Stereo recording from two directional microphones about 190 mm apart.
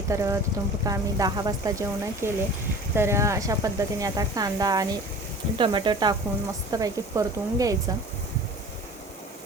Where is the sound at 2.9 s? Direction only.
15° right (ahead or behind).